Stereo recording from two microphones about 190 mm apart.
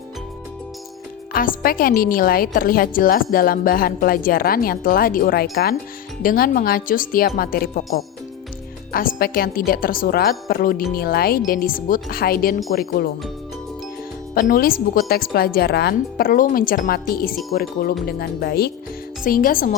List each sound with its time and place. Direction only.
1.3 s speech: 50° left (ahead or behind)
14.3 s speech: 50° left (ahead or behind)